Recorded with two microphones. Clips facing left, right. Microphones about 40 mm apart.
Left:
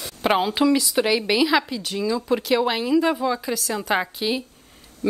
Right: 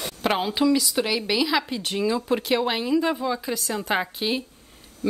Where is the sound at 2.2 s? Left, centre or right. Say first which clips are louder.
Left 2 dB; centre.